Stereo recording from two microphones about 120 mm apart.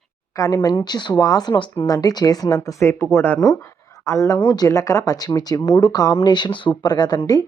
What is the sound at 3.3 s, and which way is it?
A woman's voice, 35° left (ahead or behind).